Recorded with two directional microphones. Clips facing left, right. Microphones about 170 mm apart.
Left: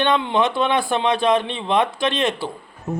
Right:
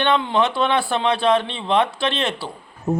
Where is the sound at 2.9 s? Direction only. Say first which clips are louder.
Right 5 dB; 35° right (ahead or behind).